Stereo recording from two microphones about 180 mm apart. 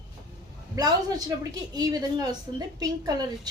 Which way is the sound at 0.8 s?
20° right (ahead or behind).